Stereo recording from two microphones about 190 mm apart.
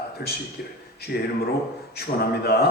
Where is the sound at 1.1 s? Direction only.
60° left (ahead or behind).